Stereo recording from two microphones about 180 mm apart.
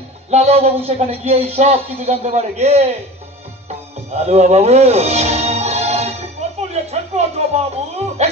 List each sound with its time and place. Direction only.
0.3 s speech: 35° right (ahead or behind)
4.1 s music: 35° right (ahead or behind)
6.7 s a sound: 35° right (ahead or behind)
8.2 s music: 40° right (ahead or behind)